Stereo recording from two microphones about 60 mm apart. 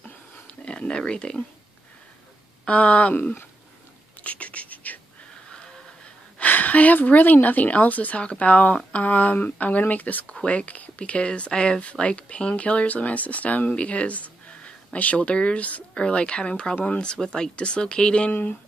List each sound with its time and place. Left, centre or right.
0.0 s a sound: centre
2.6 s speech: centre
4.2 s whispering: left
6.3 s speech: left